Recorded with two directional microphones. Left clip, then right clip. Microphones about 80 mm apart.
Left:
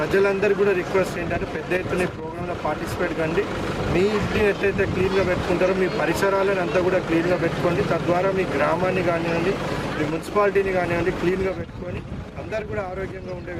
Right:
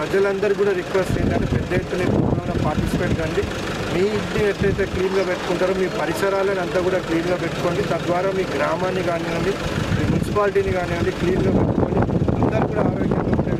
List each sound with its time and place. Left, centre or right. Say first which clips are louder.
0.2 s speech: right 1 dB; centre